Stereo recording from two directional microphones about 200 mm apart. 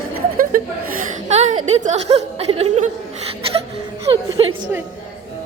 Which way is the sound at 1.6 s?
35° right (ahead or behind).